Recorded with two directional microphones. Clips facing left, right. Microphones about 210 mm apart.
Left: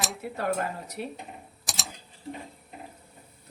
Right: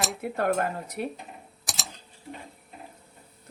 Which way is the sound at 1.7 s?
Centre (ahead or behind).